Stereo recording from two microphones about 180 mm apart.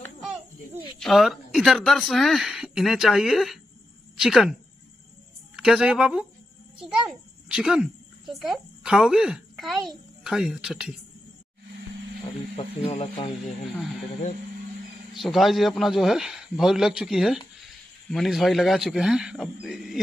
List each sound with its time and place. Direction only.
0.9 s speech: centre (ahead or behind)
5.6 s a child's voice: 5° right (ahead or behind)
12.5 s speech: 35° left (ahead or behind)
15.1 s speech: centre (ahead or behind)